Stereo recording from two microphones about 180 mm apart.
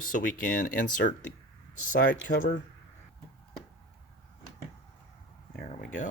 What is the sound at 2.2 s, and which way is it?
Speech, 45° left (ahead or behind).